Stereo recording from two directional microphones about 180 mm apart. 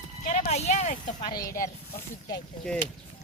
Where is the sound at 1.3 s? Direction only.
20° left (ahead or behind).